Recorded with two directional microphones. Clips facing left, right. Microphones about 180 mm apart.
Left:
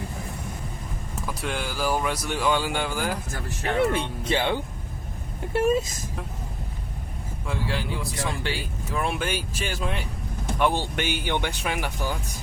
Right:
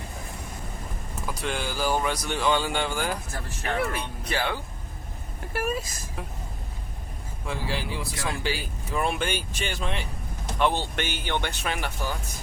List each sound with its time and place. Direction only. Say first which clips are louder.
1.3 s speech: even; centre (ahead or behind)
3.6 s speech: left 5 dB; 25° left (ahead or behind)
7.4 s speech: left 1 dB; centre (ahead or behind)